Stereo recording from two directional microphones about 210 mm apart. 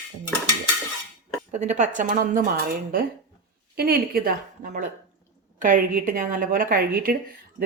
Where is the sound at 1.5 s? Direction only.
35° right (ahead or behind).